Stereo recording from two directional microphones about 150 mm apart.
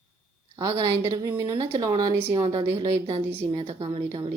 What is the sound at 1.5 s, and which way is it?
A woman's voice, 35° right (ahead or behind).